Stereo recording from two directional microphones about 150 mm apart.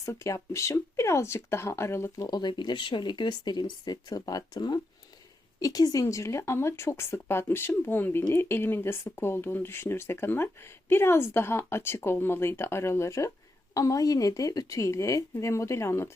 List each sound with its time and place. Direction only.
0.0 s speech: 20° left (ahead or behind)